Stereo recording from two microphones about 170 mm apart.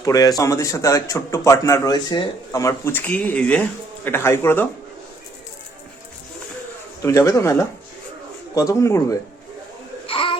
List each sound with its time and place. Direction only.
0.0 s a man's voice: 20° left (ahead or behind)
7.0 s a man's voice: 15° left (ahead or behind)
10.1 s baby cry: 30° left (ahead or behind)